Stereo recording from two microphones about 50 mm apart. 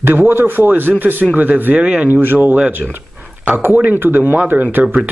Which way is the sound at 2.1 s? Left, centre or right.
Right.